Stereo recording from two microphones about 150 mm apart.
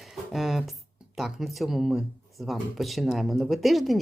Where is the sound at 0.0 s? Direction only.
Centre (ahead or behind).